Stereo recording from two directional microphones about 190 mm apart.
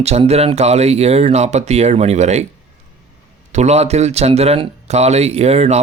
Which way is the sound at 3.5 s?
35° right (ahead or behind).